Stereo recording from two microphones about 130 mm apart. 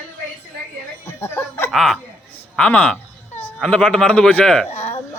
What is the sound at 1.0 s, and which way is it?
Snicker, 20° left (ahead or behind).